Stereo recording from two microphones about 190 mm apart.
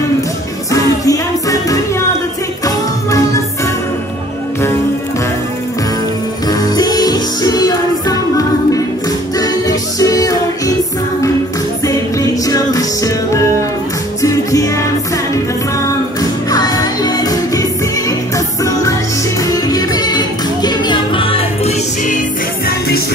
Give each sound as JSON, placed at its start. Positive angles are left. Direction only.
{"t": 1.0, "sound": "music", "side_deg": 20}
{"t": 6.6, "sound": "music", "side_deg": 20}
{"t": 11.8, "sound": "music", "side_deg": 20}
{"t": 16.2, "sound": "music", "side_deg": 20}
{"t": 22.7, "sound": "music", "side_deg": 55}